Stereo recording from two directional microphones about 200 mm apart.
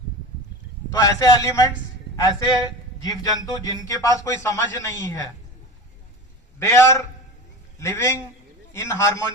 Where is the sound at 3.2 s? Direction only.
15° left (ahead or behind).